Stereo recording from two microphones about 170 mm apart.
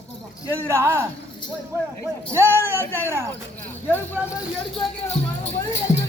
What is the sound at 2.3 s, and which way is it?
Speech, 15° right (ahead or behind).